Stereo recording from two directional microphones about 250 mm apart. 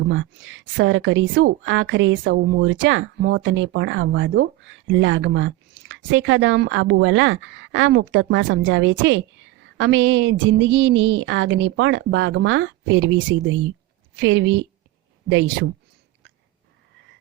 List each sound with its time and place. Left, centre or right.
0.1 s a woman's voice: right